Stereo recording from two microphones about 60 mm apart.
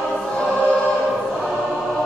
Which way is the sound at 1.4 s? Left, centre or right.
Centre.